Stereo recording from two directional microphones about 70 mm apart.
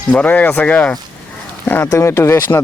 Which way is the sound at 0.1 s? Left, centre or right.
Left.